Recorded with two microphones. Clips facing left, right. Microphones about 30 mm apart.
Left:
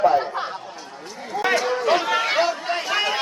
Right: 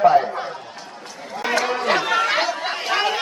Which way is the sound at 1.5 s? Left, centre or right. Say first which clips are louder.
Right 2 dB; right.